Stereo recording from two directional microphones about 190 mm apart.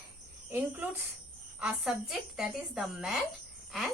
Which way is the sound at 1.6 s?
5° right (ahead or behind).